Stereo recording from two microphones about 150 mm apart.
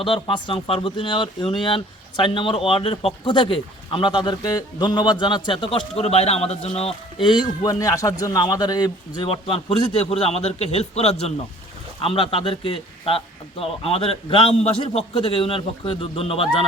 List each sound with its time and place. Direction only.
0.0 s speech: 35° left (ahead or behind)